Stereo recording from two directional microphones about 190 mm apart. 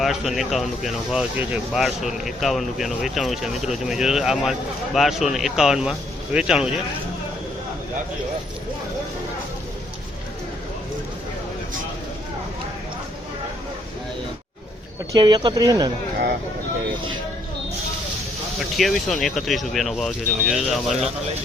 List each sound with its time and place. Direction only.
0.0 s speech: centre (ahead or behind)
15.1 s speech: 25° right (ahead or behind)
18.8 s speech: centre (ahead or behind)